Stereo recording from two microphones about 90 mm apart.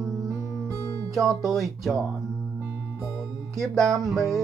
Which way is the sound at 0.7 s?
35° right (ahead or behind).